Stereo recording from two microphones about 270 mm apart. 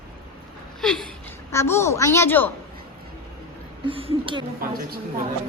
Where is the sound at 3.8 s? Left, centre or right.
Centre.